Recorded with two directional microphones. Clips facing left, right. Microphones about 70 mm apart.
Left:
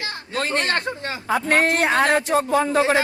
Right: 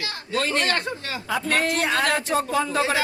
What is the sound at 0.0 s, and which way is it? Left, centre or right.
Speech, left.